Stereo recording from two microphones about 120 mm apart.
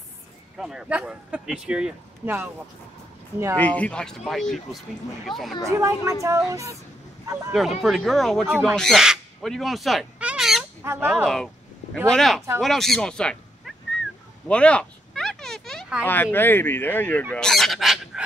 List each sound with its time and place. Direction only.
0.6 s speech: 5° right (ahead or behind)
3.5 s speech: 15° left (ahead or behind)
5.7 s a woman's voice: 25° right (ahead or behind)
7.5 s speech: centre (ahead or behind)
8.7 s crow: centre (ahead or behind)
10.8 s speech: 20° right (ahead or behind)
11.2 s a sound: 5° left (ahead or behind)
12.1 s speech: centre (ahead or behind)
14.5 s a sound: 10° left (ahead or behind)
16.1 s speech: 15° left (ahead or behind); by 18.2 s centre (ahead or behind)